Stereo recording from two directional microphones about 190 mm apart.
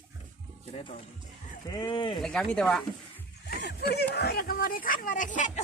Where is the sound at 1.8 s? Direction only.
25° left (ahead or behind).